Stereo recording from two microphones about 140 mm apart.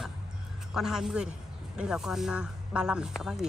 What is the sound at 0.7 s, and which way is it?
Speech, 5° right (ahead or behind).